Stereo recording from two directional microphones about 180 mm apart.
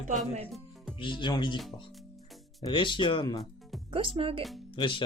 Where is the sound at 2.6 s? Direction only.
25° left (ahead or behind).